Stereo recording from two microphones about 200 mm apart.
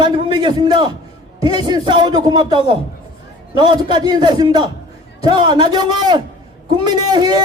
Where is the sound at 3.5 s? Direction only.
20° right (ahead or behind).